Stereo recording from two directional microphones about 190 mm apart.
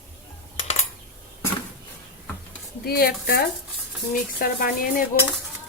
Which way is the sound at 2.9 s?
55° left (ahead or behind).